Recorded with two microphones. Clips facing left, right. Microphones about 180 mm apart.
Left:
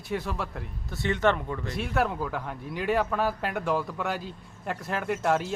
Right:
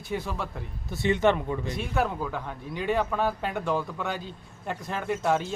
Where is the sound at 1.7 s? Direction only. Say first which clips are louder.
Left 2 dB; centre (ahead or behind).